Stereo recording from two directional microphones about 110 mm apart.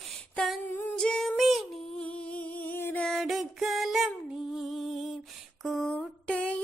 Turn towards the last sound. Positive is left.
turn(degrees=10)  # may be behind; listen again after turning